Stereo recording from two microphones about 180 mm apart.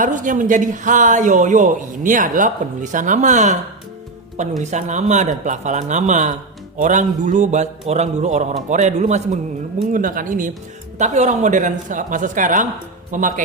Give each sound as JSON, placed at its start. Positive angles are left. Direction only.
{"t": 0.0, "sound": "speech", "side_deg": -45}
{"t": 4.6, "sound": "a man's voice", "side_deg": -40}